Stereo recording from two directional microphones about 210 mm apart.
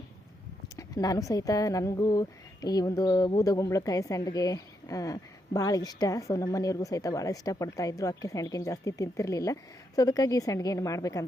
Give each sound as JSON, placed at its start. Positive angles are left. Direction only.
{"t": 0.8, "sound": "a woman's voice", "side_deg": 15}